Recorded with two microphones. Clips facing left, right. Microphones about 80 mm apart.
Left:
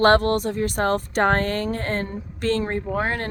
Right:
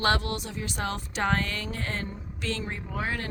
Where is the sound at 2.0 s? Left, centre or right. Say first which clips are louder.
Left 9 dB; left.